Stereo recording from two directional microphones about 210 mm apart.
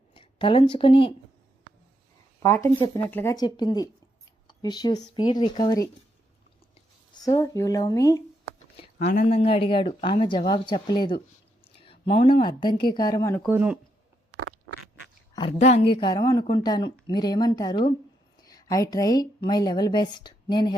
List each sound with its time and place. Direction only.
0.1 s speech: 25° left (ahead or behind)
2.6 s speech: 20° left (ahead or behind)
7.3 s speech: 15° left (ahead or behind)
8.7 s speech: 30° left (ahead or behind)
13.5 s speech: 10° right (ahead or behind)
14.3 s duck: 50° right (ahead or behind)
15.4 s a woman's voice: 30° left (ahead or behind)